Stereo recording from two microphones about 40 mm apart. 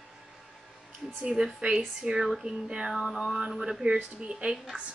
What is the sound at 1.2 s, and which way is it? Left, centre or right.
Speech, right.